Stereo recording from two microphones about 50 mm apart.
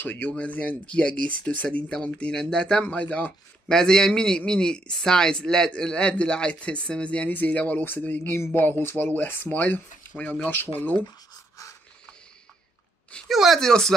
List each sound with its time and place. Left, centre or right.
0.0 s speech: left
0.3 s a man's voice: left
8.2 s speech: left
8.5 s speech: left
13.3 s speech: centre
13.6 s a man's voice: centre